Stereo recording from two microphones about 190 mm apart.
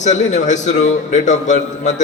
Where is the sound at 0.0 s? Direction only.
40° left (ahead or behind).